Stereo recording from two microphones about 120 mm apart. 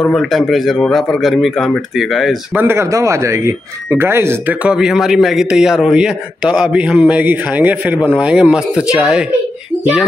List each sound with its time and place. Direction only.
0.0 s a man's voice: 5° left (ahead or behind)
2.5 s speech: 20° right (ahead or behind)
4.6 s a man's voice: 5° right (ahead or behind)